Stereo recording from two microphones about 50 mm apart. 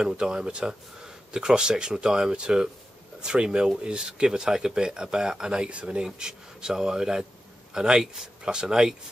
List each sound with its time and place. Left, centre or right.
0.0 s speech: centre